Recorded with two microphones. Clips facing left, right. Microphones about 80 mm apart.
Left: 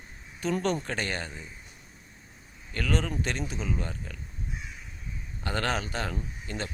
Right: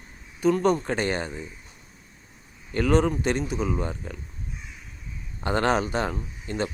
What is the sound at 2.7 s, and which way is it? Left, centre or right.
Speech, right.